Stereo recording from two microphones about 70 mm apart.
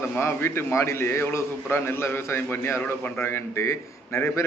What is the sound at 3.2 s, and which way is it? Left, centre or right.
A man's voice, left.